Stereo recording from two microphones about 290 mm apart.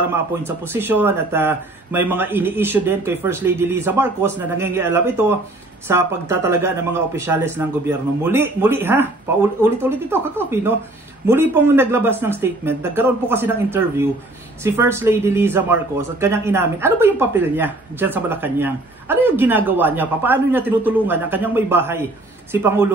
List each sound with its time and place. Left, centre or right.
0.5 s speech: centre